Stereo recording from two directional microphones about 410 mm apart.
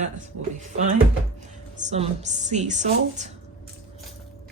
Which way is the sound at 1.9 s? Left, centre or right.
Centre.